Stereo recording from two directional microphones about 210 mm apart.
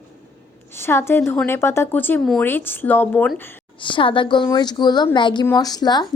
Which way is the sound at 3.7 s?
25° left (ahead or behind).